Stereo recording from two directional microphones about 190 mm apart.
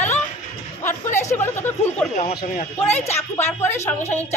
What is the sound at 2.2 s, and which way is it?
Speech, 40° left (ahead or behind).